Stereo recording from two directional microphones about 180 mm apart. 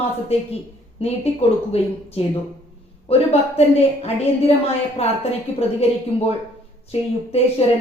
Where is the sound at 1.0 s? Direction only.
35° left (ahead or behind).